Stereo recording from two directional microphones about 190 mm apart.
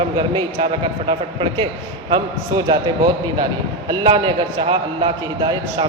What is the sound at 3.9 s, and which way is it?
A man's voice, 25° right (ahead or behind).